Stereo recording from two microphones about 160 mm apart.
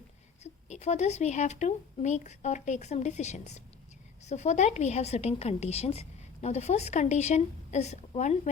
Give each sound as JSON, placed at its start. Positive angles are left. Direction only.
{"t": 0.7, "sound": "a woman's voice", "side_deg": 45}